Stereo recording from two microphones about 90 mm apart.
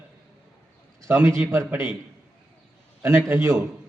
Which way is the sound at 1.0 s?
30° right (ahead or behind).